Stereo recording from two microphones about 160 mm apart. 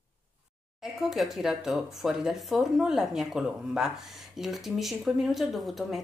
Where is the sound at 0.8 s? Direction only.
Centre (ahead or behind).